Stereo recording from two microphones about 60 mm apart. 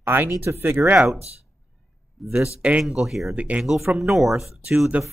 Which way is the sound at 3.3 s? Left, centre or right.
Right.